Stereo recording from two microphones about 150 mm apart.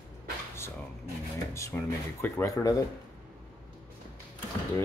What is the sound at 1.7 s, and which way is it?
Speech, 15° left (ahead or behind).